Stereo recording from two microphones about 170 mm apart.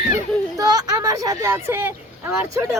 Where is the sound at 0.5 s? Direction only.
20° right (ahead or behind).